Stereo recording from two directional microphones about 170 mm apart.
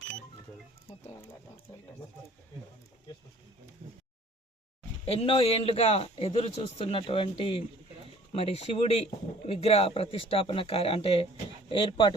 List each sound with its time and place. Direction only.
5.0 s speech: 35° left (ahead or behind)